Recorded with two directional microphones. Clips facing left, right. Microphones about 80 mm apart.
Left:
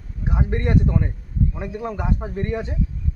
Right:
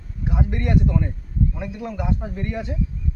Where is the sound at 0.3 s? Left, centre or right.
Left.